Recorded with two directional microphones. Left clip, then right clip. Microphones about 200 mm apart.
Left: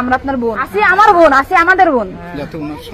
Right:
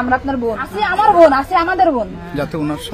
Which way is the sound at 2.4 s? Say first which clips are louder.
Right 4 dB; 55° right (ahead or behind).